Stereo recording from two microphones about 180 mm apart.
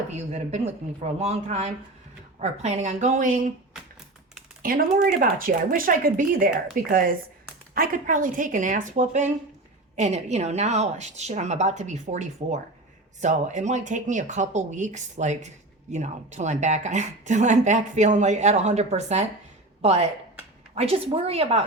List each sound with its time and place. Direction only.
0.1 s speech: 40° right (ahead or behind)
4.6 s speech: 50° right (ahead or behind); by 21.6 s 35° right (ahead or behind)